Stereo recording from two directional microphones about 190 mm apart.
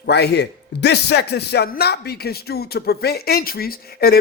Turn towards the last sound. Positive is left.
turn(degrees=55)  # may be behind; listen again after turning